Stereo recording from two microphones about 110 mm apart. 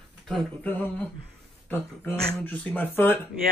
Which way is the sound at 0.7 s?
15° left (ahead or behind).